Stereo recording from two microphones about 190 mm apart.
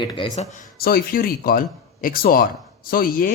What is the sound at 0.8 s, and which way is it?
A man's voice, 55° left (ahead or behind).